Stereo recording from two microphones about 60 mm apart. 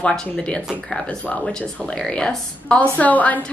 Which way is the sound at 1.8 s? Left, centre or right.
Centre.